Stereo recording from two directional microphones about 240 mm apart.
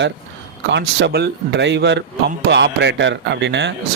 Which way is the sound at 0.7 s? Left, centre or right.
Right.